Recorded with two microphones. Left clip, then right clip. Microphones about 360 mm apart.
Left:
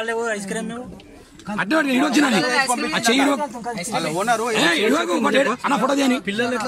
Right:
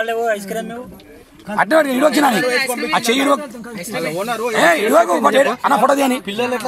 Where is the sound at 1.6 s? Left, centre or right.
Centre.